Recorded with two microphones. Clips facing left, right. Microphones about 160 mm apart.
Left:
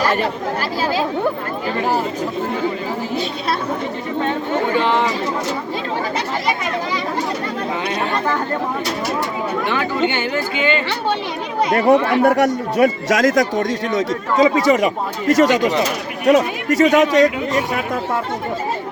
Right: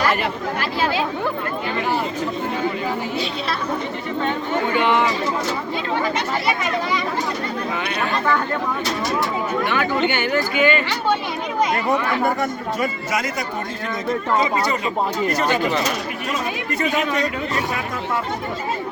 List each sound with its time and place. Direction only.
0.0 s chatter: 35° left (ahead or behind)
0.8 s speech: 40° left (ahead or behind)
4.7 s speech: 35° left (ahead or behind)
9.6 s speech: 25° left (ahead or behind)
12.2 s speech: 80° left